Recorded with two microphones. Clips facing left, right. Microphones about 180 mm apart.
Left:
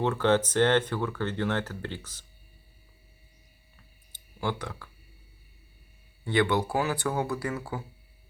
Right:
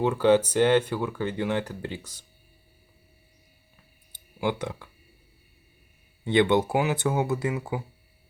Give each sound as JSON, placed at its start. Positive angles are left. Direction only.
{"t": 0.0, "sound": "speech", "side_deg": -10}
{"t": 4.1, "sound": "a sound", "side_deg": -15}
{"t": 6.2, "sound": "speech", "side_deg": -20}